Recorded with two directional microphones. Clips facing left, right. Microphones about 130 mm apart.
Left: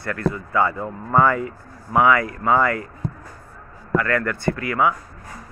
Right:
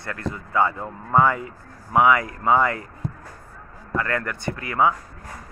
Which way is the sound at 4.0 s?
20° right (ahead or behind).